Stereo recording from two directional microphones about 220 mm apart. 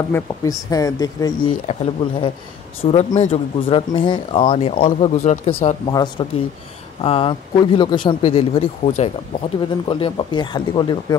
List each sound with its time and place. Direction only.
0.1 s speech: 15° left (ahead or behind)